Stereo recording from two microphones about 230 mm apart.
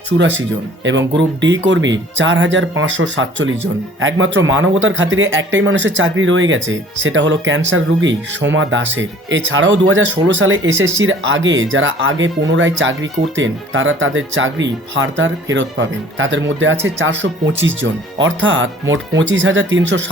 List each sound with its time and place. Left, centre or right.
0.2 s a man's voice: right